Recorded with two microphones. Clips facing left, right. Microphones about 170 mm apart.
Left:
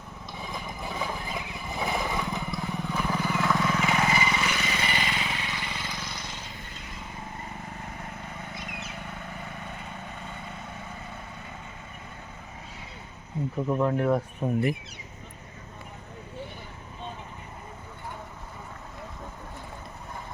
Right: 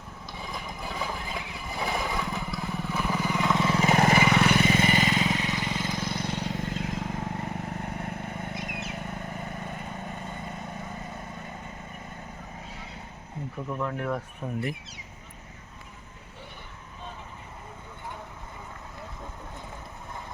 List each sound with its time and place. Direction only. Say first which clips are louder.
0.3 s a sound: left 1 dB; centre (ahead or behind)
1.8 s vehicle: left 1 dB; centre (ahead or behind); by 7.9 s 70° right (ahead or behind)
7.9 s vehicle: right 5 dB; 50° right (ahead or behind)
13.7 s speech: left 6 dB; 30° left (ahead or behind)